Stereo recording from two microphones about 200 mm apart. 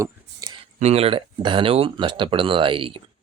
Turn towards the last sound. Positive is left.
turn(degrees=-25)  # may be behind; listen again after turning